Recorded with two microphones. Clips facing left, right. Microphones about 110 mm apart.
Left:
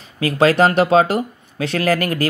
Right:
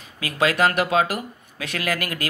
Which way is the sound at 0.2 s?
35° left (ahead or behind).